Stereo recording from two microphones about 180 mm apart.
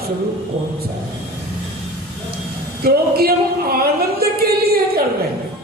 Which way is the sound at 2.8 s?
55° right (ahead or behind).